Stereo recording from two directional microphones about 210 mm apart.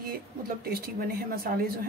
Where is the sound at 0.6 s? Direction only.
45° right (ahead or behind).